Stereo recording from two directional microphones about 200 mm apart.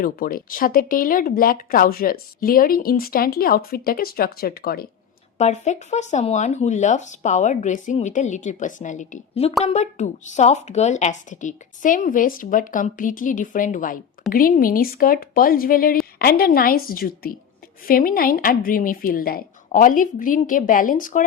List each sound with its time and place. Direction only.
0.0 s speech: 45° left (ahead or behind)
5.4 s a woman's voice: 35° left (ahead or behind)